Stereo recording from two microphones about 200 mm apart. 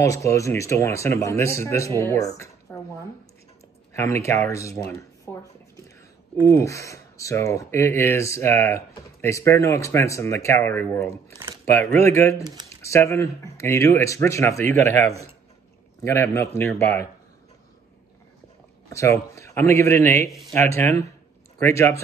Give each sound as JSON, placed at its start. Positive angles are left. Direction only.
{"t": 0.0, "sound": "speech", "side_deg": 15}
{"t": 2.3, "sound": "a sound", "side_deg": 15}
{"t": 4.0, "sound": "speech", "side_deg": 15}
{"t": 6.4, "sound": "speech", "side_deg": 15}
{"t": 16.0, "sound": "speech", "side_deg": 15}
{"t": 18.9, "sound": "speech", "side_deg": 15}